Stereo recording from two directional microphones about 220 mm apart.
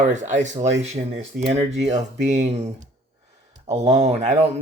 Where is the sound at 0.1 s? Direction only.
35° right (ahead or behind).